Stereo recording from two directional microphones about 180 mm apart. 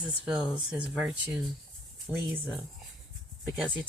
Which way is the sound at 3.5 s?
10° right (ahead or behind).